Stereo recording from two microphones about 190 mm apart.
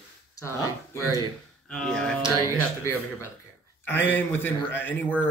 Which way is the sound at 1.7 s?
5° left (ahead or behind).